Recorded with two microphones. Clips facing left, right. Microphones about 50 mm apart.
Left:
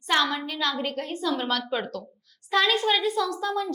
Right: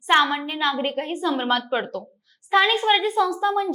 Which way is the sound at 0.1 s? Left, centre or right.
Right.